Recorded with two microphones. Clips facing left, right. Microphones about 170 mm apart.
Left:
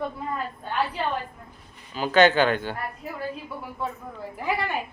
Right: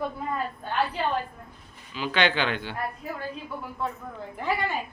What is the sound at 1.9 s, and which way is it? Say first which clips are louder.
Speech: left 7 dB; 45° left (ahead or behind).